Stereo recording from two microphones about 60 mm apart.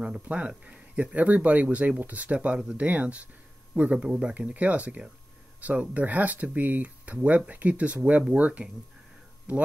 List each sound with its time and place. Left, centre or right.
0.2 s speech: right
2.9 s speech: right